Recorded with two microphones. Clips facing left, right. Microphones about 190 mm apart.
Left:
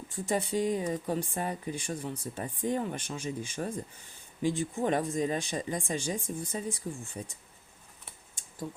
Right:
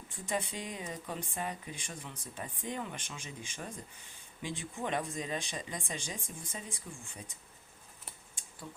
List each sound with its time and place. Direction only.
0.3 s speech: 45° left (ahead or behind)
8.4 s scissors: 45° left (ahead or behind)